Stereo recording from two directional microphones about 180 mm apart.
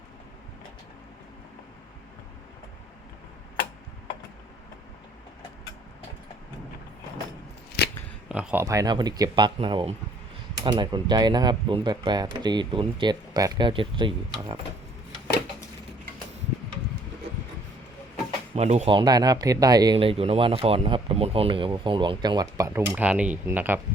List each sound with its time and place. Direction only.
7.8 s chewing: 65° left (ahead or behind)
8.3 s speech: 5° right (ahead or behind)
8.6 s speech: 20° right (ahead or behind)
18.5 s speech: 35° right (ahead or behind); by 22.8 s 20° right (ahead or behind)
22.9 s speech: 10° right (ahead or behind)